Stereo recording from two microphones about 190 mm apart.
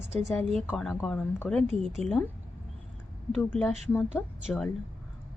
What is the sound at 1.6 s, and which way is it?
Speech, 35° right (ahead or behind).